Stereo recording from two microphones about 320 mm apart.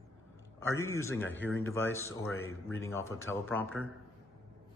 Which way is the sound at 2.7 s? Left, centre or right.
Centre.